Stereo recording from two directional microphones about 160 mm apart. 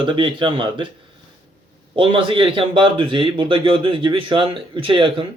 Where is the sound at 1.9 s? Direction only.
30° right (ahead or behind).